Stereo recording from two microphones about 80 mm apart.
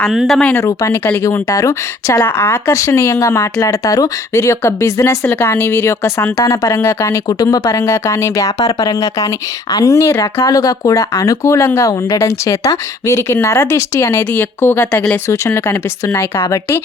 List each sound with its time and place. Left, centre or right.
0.1 s speech: centre
1.5 s speech: left
2.2 s speech: left
2.7 s speech: left
3.6 s speech: left
4.4 s speech: left
7.3 s speech: left
7.7 s speech: left